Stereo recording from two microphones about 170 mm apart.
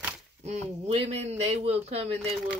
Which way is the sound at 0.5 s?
35° right (ahead or behind).